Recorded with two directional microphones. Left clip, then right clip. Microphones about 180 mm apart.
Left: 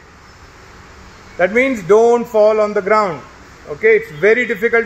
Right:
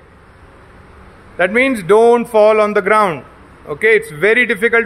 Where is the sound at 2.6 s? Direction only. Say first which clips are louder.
Right 2 dB; 30° right (ahead or behind).